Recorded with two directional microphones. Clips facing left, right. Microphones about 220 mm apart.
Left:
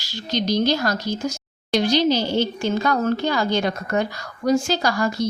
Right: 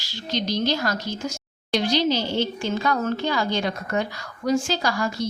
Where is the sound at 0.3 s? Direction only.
40° left (ahead or behind).